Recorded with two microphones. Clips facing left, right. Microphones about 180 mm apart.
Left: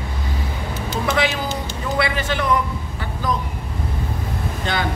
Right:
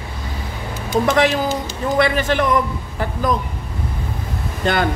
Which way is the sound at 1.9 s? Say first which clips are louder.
Right 5 dB; 45° right (ahead or behind).